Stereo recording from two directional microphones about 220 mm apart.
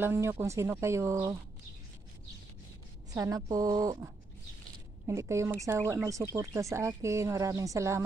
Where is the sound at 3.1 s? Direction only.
15° right (ahead or behind).